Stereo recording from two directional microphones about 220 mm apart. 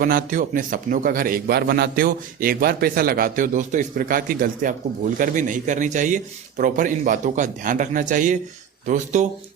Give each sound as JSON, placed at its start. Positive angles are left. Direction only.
{"t": 0.0, "sound": "a man's voice", "side_deg": -40}